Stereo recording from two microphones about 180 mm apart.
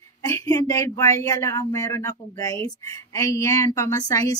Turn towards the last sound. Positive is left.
turn(degrees=20)  # may be behind; listen again after turning